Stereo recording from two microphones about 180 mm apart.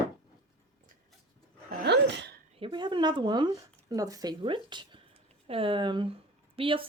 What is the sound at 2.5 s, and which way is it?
Speech, 30° right (ahead or behind).